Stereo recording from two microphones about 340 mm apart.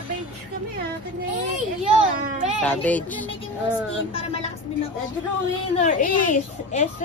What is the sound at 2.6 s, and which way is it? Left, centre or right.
Speech, centre.